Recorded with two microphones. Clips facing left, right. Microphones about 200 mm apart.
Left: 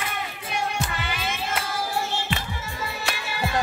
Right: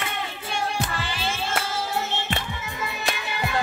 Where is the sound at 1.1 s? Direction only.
30° right (ahead or behind).